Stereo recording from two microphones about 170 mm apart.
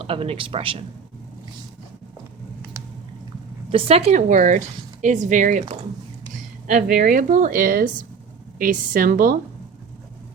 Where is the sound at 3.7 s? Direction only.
35° right (ahead or behind).